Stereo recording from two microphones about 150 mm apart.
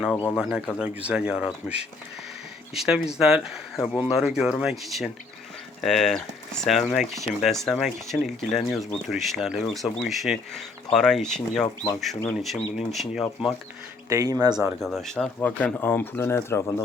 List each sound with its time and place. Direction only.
0.1 s speech: 10° left (ahead or behind)
0.8 s speech: 5° right (ahead or behind)
14.1 s speech: 25° right (ahead or behind)
14.8 s speech: centre (ahead or behind)